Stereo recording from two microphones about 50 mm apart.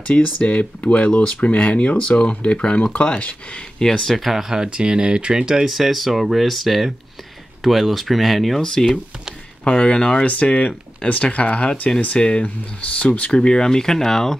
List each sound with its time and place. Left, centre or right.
0.1 s speech: left
3.8 s speech: centre
4.2 s speech: centre
4.6 s speech: centre
9.7 s speech: centre
13.3 s speech: centre